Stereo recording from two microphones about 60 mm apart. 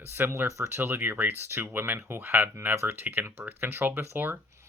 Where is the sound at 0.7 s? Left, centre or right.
Right.